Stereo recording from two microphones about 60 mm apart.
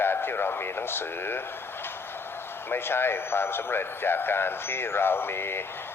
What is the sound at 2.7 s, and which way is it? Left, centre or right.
Speech, left.